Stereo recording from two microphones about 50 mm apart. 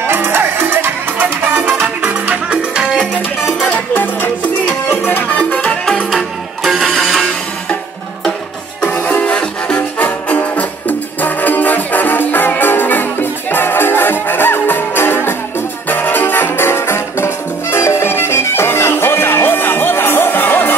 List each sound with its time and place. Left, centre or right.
0.0 s music: right
2.0 s music: right
3.7 s music: left
5.6 s music: centre
6.0 s music: centre
8.9 s music: left
9.2 s music: left
9.8 s music: left